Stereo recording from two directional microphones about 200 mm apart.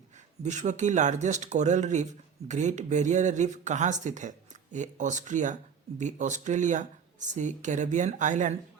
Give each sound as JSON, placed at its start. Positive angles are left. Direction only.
{"t": 0.4, "sound": "speech", "side_deg": -35}